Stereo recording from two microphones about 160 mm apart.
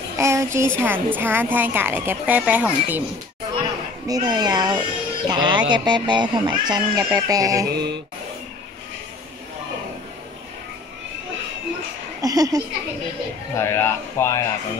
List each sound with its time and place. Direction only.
0.2 s a woman's voice: 15° right (ahead or behind)
4.1 s speech: 25° right (ahead or behind)
7.7 s mantra: 90° right
12.2 s speech: 20° right (ahead or behind)
13.6 s speech: 15° left (ahead or behind)